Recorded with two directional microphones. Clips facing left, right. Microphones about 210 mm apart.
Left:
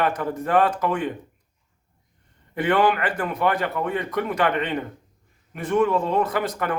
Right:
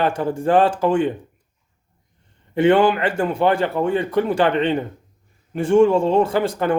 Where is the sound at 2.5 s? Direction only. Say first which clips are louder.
Right 5 dB; 25° right (ahead or behind).